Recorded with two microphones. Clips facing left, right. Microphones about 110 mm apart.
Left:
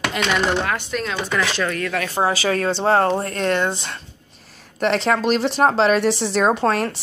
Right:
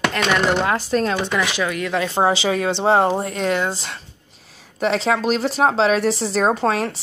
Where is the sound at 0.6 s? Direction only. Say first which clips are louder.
Right 5 dB; 30° right (ahead or behind).